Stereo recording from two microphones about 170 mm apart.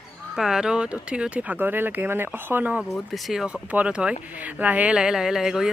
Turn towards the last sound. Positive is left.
turn(degrees=-5)  # may be behind; listen again after turning